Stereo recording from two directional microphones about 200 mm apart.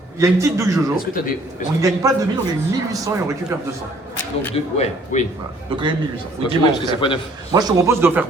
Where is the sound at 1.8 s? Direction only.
15° right (ahead or behind).